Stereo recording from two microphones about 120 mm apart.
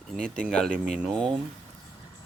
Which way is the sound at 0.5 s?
5° left (ahead or behind).